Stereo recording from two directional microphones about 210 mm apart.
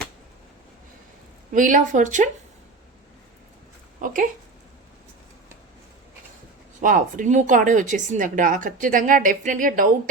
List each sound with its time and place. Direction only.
1.5 s a woman's voice: 40° right (ahead or behind)
4.0 s speech: 40° right (ahead or behind)
6.8 s a woman's voice: 40° right (ahead or behind)